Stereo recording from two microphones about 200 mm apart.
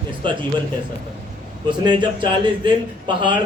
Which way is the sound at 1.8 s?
25° right (ahead or behind).